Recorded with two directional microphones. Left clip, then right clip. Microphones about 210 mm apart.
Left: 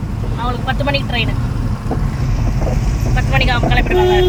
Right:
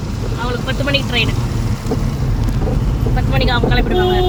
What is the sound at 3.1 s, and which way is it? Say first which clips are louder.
Speech: left 1 dB; 20° right (ahead or behind).